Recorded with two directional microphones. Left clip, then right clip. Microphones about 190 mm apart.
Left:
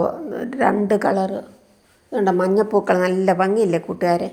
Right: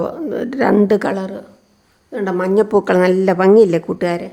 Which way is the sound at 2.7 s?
35° right (ahead or behind).